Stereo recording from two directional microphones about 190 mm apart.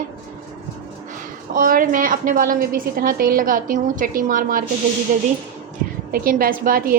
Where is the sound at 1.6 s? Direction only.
45° right (ahead or behind).